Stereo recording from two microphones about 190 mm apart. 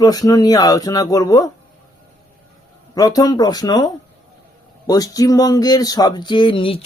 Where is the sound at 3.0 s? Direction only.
20° left (ahead or behind).